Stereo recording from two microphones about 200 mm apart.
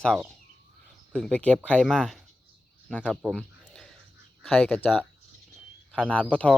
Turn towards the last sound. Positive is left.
turn(degrees=5)  # may be behind; listen again after turning